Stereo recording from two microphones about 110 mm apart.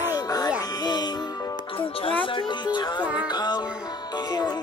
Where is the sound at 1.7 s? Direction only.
55° left (ahead or behind).